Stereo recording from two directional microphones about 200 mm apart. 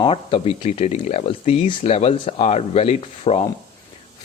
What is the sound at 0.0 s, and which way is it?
Speech, 25° left (ahead or behind).